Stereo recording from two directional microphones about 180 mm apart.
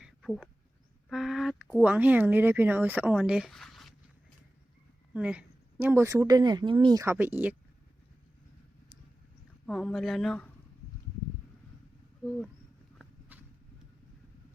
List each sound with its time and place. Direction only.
0.0 s a sound: centre (ahead or behind)
1.8 s a woman's voice: 10° right (ahead or behind)
5.1 s a woman's voice: 5° right (ahead or behind)
9.6 s speech: centre (ahead or behind)
12.2 s speech: centre (ahead or behind)
13.3 s vehicle: 10° right (ahead or behind)